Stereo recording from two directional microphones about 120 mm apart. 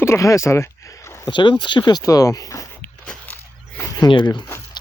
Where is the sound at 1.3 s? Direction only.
40° left (ahead or behind).